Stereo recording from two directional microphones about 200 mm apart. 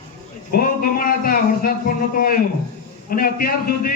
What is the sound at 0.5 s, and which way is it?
A man's voice, 45° left (ahead or behind).